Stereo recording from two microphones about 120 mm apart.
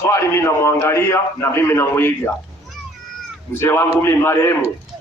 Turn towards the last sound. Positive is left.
turn(degrees=20)  # may be behind; listen again after turning